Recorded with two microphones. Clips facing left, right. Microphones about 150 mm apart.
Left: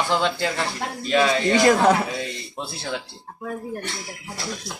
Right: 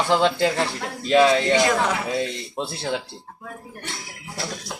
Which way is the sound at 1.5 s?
40° left (ahead or behind).